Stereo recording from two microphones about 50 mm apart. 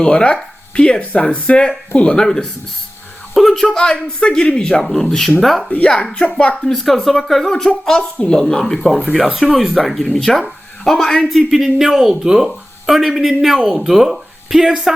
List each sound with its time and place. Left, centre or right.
0.0 s speech: left
2.2 s speech: centre
5.7 s speech: left
6.7 s speech: centre